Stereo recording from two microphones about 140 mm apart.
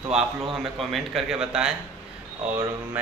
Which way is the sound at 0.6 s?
Centre (ahead or behind).